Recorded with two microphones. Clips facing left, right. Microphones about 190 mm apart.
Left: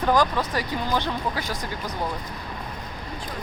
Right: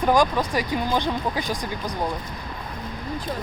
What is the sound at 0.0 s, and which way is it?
Speech, 15° right (ahead or behind).